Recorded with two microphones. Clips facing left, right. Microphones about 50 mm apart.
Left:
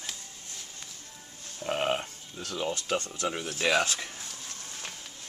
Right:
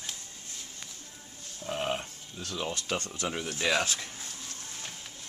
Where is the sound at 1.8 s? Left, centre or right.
Left.